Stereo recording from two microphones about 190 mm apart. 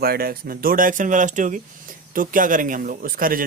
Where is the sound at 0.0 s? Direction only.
55° right (ahead or behind).